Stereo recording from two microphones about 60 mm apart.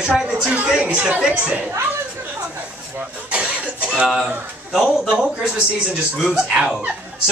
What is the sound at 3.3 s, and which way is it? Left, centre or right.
Cough, centre.